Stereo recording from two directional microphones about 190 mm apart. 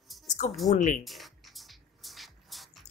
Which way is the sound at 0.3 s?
40° left (ahead or behind).